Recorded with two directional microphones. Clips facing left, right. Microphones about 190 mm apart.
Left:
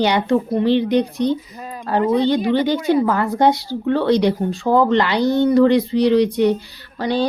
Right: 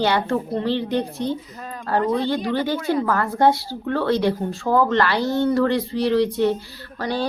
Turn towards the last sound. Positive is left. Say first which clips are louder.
# left 5 dB
turn(degrees=20)  # may be behind; listen again after turning